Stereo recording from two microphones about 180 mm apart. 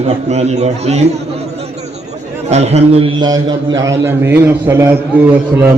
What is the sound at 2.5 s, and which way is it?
Speech, 35° right (ahead or behind).